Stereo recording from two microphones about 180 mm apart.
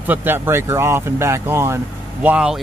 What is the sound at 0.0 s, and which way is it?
Speech, 10° right (ahead or behind).